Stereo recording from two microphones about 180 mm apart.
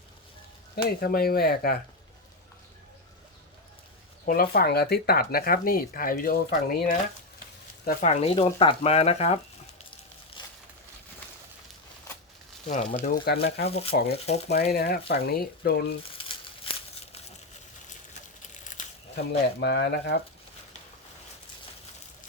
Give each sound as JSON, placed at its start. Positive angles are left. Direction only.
{"t": 0.8, "sound": "speech", "side_deg": 55}
{"t": 4.3, "sound": "speech", "side_deg": 55}
{"t": 8.0, "sound": "speech", "side_deg": 35}
{"t": 10.4, "sound": "a sound", "side_deg": 25}
{"t": 12.6, "sound": "speech", "side_deg": 45}
{"t": 13.2, "sound": "speech", "side_deg": 60}
{"t": 13.7, "sound": "speech", "side_deg": 35}
{"t": 14.7, "sound": "speech", "side_deg": 60}
{"t": 16.2, "sound": "crumpling", "side_deg": 30}
{"t": 18.8, "sound": "a sound", "side_deg": 45}
{"t": 19.1, "sound": "speech", "side_deg": 65}